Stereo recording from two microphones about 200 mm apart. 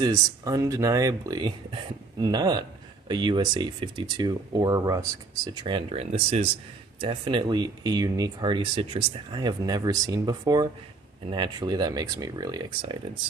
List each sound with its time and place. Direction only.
0.0 s speech: 15° right (ahead or behind)